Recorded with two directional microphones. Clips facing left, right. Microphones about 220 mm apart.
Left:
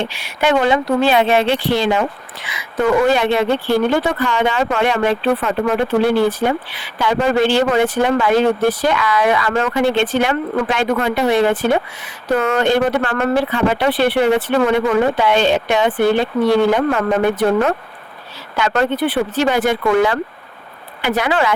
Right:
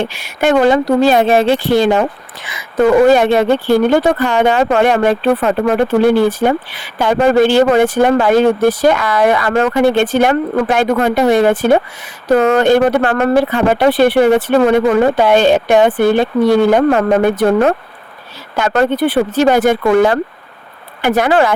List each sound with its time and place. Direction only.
0.0 s speech: 45° right (ahead or behind)
3.1 s speech: 45° right (ahead or behind)